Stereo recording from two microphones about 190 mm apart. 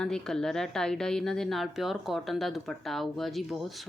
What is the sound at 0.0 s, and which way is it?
Speech, 5° left (ahead or behind).